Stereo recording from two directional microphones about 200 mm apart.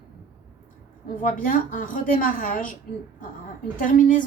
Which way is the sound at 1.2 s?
45° left (ahead or behind).